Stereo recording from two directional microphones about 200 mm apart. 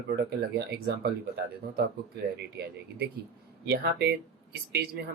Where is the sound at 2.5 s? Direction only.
55° right (ahead or behind).